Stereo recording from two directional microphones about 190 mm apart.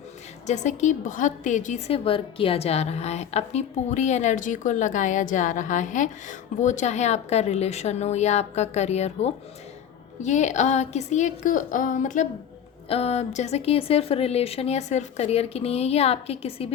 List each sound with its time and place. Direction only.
0.4 s a woman's voice: 40° left (ahead or behind)